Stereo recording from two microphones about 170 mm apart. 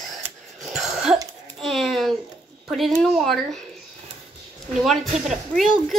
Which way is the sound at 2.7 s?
Centre (ahead or behind).